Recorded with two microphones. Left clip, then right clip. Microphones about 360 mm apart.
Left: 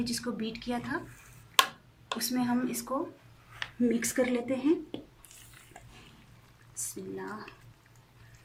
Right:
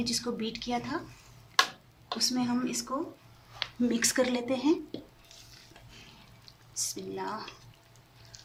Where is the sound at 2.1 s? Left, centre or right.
Centre.